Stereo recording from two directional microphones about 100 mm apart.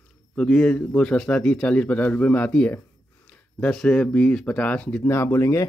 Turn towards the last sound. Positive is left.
turn(degrees=30)  # may be behind; listen again after turning